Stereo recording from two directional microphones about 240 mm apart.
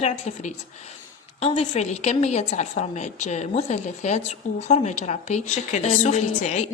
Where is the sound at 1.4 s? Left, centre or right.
Left.